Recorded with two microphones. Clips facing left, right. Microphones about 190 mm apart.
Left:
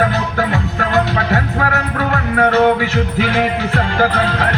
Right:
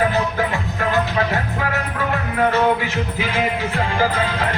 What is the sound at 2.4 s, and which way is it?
Music, 75° left (ahead or behind).